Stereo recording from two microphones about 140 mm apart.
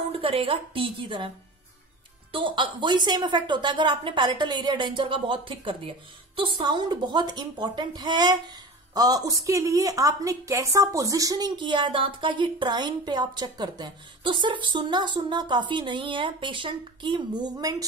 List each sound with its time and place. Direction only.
0.2 s speech: 40° right (ahead or behind)
2.3 s speech: 35° right (ahead or behind)